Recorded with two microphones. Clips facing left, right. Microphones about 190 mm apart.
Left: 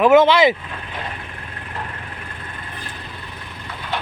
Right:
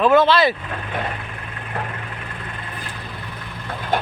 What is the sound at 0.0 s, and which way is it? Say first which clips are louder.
Speech: left 3 dB; 15° left (ahead or behind).